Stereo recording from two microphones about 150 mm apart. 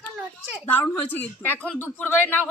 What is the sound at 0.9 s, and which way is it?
A woman's voice, 10° left (ahead or behind).